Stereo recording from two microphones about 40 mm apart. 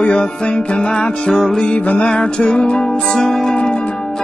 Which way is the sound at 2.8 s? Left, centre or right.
Centre.